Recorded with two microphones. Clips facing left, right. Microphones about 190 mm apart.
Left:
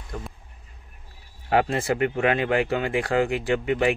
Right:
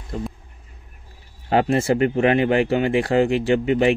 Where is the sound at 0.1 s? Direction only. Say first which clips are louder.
Right 7 dB; 25° right (ahead or behind).